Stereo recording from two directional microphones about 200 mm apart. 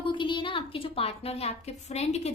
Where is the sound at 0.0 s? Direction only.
25° left (ahead or behind).